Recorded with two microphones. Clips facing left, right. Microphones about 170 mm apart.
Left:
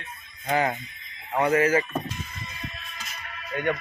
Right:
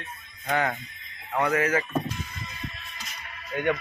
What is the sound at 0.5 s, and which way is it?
Speech, 25° left (ahead or behind).